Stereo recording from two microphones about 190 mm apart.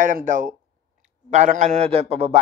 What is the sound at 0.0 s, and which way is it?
A man's voice, 45° right (ahead or behind).